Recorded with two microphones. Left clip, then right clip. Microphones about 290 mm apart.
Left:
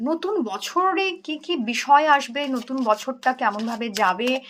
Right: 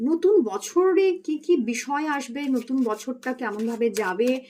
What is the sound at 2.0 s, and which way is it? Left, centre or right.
Speech, centre.